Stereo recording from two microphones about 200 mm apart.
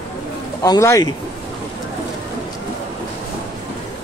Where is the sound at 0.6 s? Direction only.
15° left (ahead or behind).